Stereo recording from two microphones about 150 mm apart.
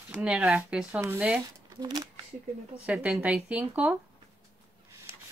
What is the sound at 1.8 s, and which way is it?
Speech, 25° right (ahead or behind).